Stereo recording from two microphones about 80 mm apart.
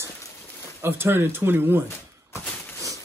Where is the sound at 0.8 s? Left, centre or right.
Right.